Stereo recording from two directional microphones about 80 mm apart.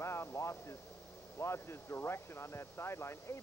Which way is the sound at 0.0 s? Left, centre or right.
Left.